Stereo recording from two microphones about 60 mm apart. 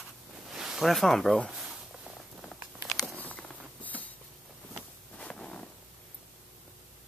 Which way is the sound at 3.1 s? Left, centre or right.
Left.